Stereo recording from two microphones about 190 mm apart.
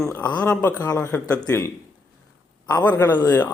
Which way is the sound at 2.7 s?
20° left (ahead or behind).